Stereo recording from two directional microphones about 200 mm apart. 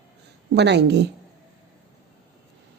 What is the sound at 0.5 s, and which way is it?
Speech, 60° right (ahead or behind).